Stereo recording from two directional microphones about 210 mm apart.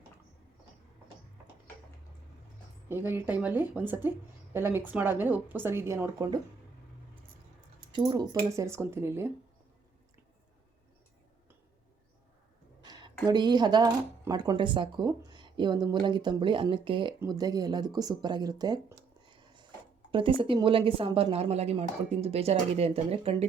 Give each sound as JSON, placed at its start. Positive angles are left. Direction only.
{"t": 2.9, "sound": "a woman's voice", "side_deg": -10}
{"t": 7.9, "sound": "a woman's voice", "side_deg": -20}
{"t": 12.8, "sound": "a sound", "side_deg": -20}
{"t": 13.2, "sound": "speech", "side_deg": -20}